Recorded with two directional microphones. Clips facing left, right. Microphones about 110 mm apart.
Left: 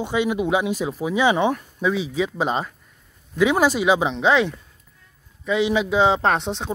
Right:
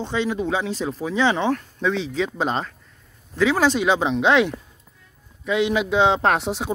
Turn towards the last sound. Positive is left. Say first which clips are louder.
# right 1 dB
turn(degrees=-5)  # may be behind; listen again after turning